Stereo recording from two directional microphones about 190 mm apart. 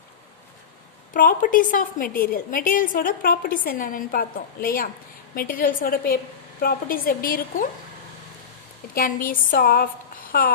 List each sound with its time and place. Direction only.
1.1 s a woman's voice: 45° left (ahead or behind)
9.0 s a woman's voice: 45° left (ahead or behind)